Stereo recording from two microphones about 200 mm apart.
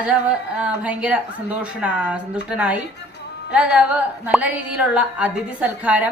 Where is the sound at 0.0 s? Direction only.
5° right (ahead or behind).